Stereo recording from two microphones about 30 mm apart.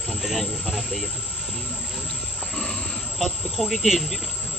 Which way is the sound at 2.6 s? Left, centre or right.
Centre.